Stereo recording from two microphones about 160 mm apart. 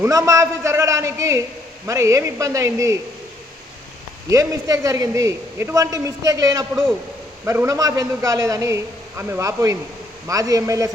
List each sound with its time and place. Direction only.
0.0 s a man's voice: 20° right (ahead or behind)
4.3 s a man's voice: 20° right (ahead or behind)